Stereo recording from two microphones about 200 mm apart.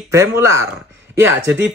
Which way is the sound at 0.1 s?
15° right (ahead or behind).